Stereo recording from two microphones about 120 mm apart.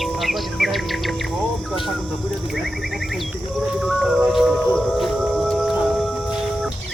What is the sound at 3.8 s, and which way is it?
Music, centre (ahead or behind).